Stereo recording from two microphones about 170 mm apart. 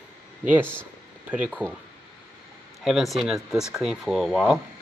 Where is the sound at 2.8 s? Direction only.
Centre (ahead or behind).